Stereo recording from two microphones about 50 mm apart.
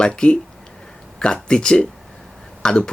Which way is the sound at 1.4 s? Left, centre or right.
Centre.